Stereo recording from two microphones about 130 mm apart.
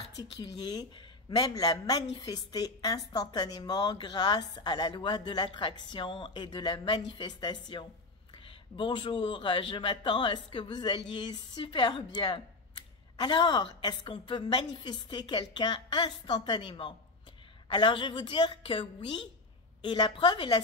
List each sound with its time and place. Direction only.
0.2 s a woman's voice: 30° left (ahead or behind)